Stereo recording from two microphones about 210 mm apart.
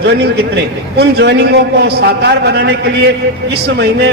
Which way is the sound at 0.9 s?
50° right (ahead or behind).